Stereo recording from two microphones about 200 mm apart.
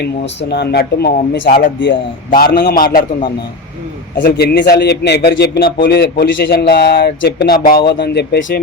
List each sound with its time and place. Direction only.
0.0 s a man's voice: 55° left (ahead or behind)
4.2 s a man's voice: 55° left (ahead or behind)